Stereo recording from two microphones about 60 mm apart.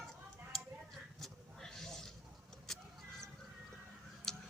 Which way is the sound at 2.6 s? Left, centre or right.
Centre.